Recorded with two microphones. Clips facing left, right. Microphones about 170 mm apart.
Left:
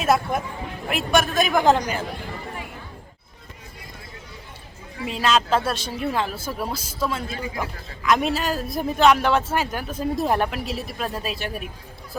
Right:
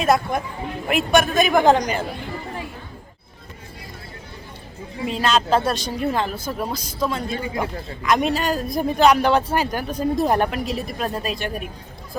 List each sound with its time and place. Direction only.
0.0 s speech: 5° left (ahead or behind)
5.0 s speech: centre (ahead or behind)
7.3 s a man's voice: 30° right (ahead or behind)
8.0 s speech: centre (ahead or behind)